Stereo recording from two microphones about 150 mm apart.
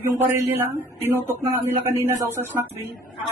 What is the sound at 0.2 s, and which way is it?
Speech, 15° right (ahead or behind).